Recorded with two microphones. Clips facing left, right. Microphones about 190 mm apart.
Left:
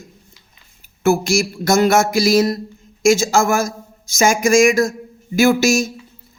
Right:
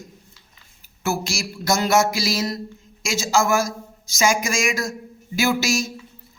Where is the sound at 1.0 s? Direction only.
50° left (ahead or behind).